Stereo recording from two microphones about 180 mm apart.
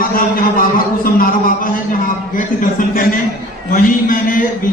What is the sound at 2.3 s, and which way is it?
A man's voice, 50° left (ahead or behind).